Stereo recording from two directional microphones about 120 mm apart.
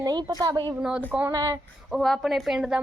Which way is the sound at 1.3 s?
30° right (ahead or behind).